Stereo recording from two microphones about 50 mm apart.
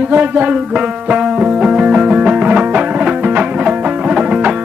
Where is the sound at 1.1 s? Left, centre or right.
Right.